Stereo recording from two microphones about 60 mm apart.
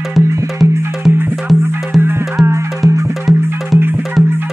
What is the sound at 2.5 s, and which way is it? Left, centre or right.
Music, right.